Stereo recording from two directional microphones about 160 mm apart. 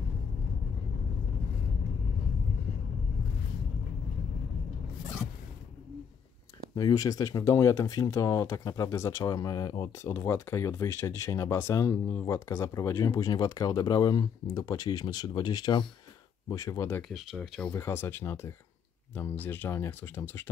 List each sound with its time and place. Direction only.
6.7 s speech: 20° left (ahead or behind)
17.1 s speech: centre (ahead or behind)